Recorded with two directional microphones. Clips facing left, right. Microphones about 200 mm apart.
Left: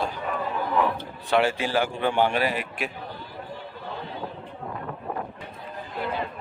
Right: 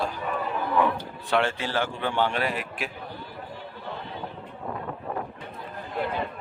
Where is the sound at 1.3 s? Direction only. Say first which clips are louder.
Left 3 dB; 5° left (ahead or behind).